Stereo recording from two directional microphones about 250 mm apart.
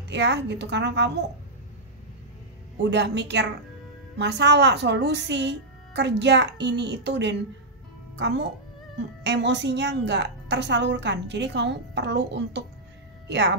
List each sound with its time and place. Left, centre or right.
0.1 s a woman's voice: right
2.8 s a woman's voice: right